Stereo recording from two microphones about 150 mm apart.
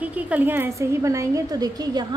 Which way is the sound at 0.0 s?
10° right (ahead or behind).